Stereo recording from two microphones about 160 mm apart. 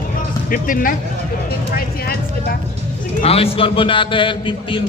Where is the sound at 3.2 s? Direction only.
40° left (ahead or behind).